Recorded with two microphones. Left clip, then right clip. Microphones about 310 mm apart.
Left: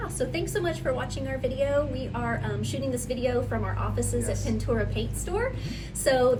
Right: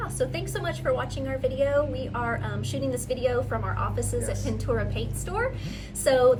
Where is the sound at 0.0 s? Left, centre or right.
Centre.